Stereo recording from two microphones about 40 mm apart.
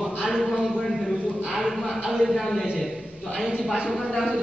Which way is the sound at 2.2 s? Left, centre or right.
Centre.